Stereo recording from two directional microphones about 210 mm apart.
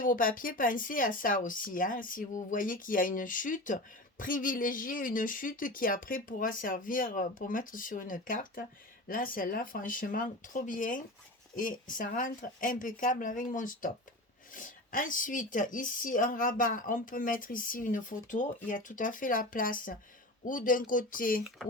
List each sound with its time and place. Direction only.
0.0 s speech: 40° left (ahead or behind)